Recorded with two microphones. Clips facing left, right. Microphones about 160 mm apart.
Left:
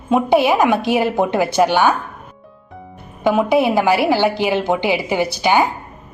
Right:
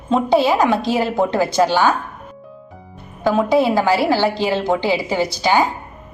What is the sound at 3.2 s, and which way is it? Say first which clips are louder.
A woman's voice: left 1 dB; 20° left (ahead or behind).